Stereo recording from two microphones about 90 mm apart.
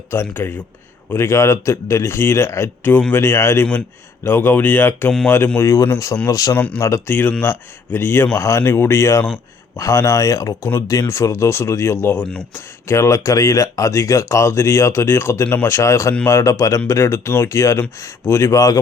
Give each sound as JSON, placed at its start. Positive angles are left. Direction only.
{"t": 0.1, "sound": "a man's voice", "side_deg": 25}
{"t": 5.5, "sound": "speech", "side_deg": 35}
{"t": 6.5, "sound": "speech", "side_deg": 20}
{"t": 6.7, "sound": "a man's voice", "side_deg": 35}
{"t": 15.7, "sound": "speech", "side_deg": 35}